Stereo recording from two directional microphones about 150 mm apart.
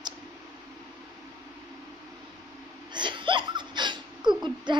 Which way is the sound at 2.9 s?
30° right (ahead or behind).